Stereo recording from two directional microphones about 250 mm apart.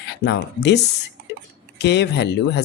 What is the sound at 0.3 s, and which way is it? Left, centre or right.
Speech, left.